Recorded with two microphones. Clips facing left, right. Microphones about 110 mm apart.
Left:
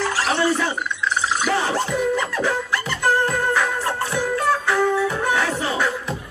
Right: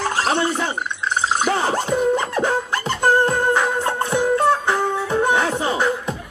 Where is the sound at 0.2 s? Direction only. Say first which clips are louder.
Even; 25° right (ahead or behind).